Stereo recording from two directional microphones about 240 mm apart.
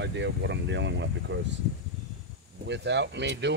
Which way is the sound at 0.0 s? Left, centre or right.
Right.